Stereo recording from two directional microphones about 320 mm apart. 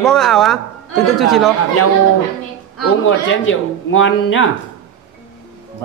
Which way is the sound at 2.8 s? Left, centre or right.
Left.